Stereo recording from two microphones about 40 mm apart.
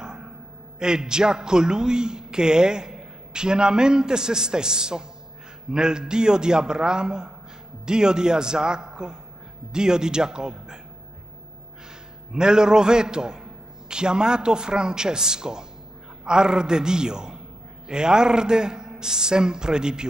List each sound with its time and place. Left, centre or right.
0.0 s a sound: centre
0.7 s a man's voice: centre
12.3 s a man's voice: centre